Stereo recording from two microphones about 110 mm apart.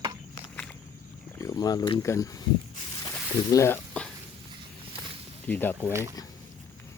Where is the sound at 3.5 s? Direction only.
25° left (ahead or behind).